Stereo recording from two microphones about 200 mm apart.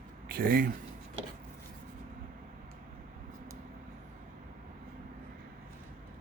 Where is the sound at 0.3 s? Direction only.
45° right (ahead or behind).